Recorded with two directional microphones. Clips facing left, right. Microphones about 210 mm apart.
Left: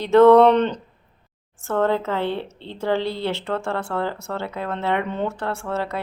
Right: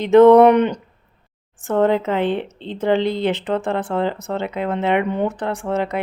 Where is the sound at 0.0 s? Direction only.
15° right (ahead or behind).